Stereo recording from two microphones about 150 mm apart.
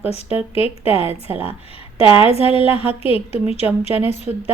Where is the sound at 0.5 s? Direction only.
40° left (ahead or behind).